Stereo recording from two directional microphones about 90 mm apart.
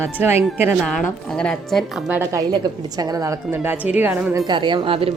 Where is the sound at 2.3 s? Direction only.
45° right (ahead or behind).